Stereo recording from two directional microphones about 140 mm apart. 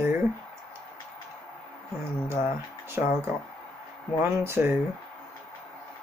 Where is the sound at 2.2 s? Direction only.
20° right (ahead or behind).